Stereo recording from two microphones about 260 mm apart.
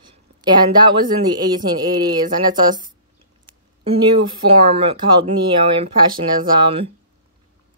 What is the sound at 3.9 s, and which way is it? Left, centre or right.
Speech, right.